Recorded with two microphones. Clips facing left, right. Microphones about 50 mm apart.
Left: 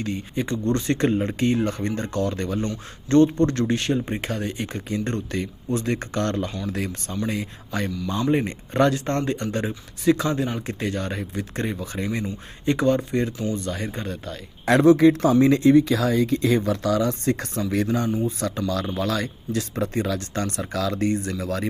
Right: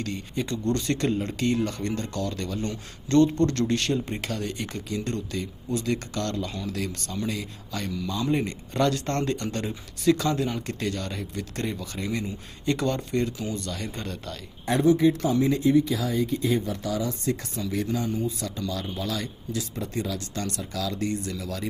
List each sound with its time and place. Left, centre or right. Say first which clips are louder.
0.0 s speech: left 3 dB; centre
9.0 s speech: left 3 dB; centre
13.9 s speech: left 3 dB; centre
14.6 s speech: left 6 dB; left
18.3 s speech: left 5 dB; left
18.7 s speech: left 6 dB; left